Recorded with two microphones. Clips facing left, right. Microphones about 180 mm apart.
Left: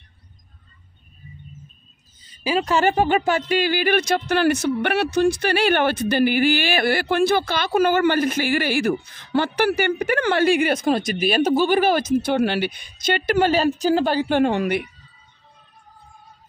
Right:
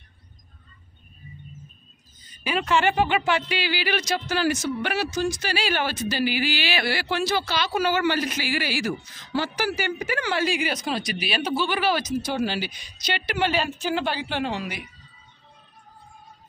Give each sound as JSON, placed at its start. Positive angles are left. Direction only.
{"t": 2.4, "sound": "speech", "side_deg": 35}